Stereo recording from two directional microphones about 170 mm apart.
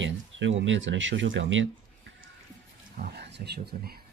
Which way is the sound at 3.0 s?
75° right (ahead or behind).